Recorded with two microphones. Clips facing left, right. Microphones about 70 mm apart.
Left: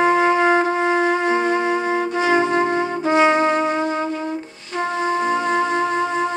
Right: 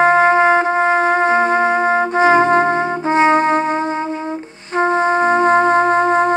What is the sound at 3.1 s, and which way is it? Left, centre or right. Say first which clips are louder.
Trumpet: right 3 dB; right.